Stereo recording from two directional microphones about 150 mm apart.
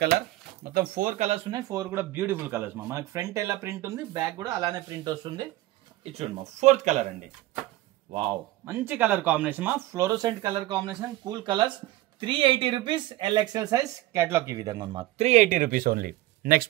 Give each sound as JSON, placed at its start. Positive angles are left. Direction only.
{"t": 0.7, "sound": "speech", "side_deg": -75}
{"t": 1.5, "sound": "speech", "side_deg": -20}
{"t": 6.1, "sound": "speech", "side_deg": -50}
{"t": 8.1, "sound": "speech", "side_deg": -40}
{"t": 8.6, "sound": "speech", "side_deg": -15}
{"t": 9.9, "sound": "speech", "side_deg": -25}
{"t": 15.1, "sound": "speech", "side_deg": -50}